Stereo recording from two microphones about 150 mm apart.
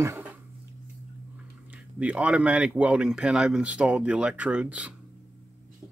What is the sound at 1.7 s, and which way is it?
Speech, 10° right (ahead or behind).